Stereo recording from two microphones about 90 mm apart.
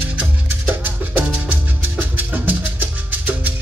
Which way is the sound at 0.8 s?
20° right (ahead or behind).